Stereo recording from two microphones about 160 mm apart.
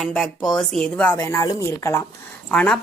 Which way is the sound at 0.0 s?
Centre (ahead or behind).